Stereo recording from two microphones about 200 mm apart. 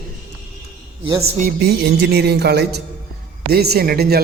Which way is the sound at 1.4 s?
55° right (ahead or behind).